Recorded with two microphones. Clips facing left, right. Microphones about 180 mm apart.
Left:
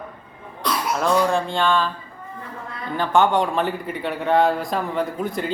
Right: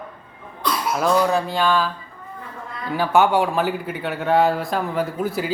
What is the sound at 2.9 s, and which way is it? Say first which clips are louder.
A man's voice: right 1 dB; 10° right (ahead or behind).